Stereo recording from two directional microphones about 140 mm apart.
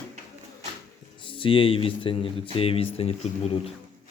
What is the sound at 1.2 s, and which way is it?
Speech, 40° left (ahead or behind).